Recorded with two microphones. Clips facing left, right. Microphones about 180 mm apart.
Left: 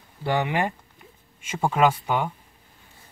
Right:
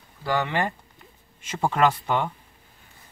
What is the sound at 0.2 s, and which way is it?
Speech, 20° left (ahead or behind).